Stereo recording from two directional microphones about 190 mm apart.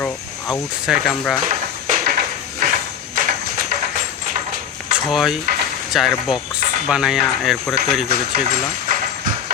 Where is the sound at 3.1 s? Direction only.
45° right (ahead or behind).